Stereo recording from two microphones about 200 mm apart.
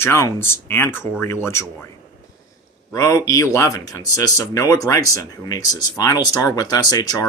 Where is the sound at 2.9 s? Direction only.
15° left (ahead or behind).